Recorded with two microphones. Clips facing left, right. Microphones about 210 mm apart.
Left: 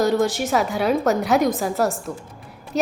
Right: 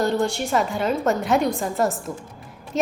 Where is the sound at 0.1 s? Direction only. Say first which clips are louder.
Left 2 dB; 5° left (ahead or behind).